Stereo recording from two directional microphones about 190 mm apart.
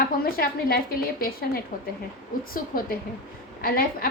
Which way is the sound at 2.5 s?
50° left (ahead or behind).